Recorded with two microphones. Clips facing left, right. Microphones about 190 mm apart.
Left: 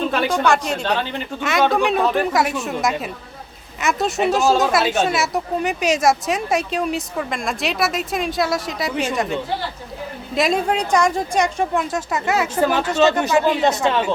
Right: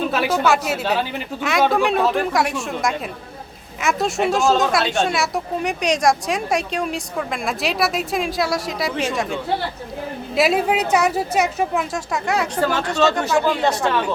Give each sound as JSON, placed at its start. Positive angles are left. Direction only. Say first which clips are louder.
{"t": 0.0, "sound": "speech", "louder": "even", "side_deg": -5}
{"t": 12.5, "sound": "speech", "louder": "left 4 dB", "side_deg": 15}